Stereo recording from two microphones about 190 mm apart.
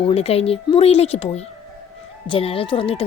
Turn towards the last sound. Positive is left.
turn(degrees=30)  # may be behind; listen again after turning